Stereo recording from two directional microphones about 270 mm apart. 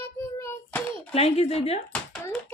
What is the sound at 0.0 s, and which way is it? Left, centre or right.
Child singing, centre.